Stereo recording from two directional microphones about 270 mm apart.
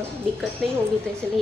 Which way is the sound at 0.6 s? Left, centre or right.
Centre.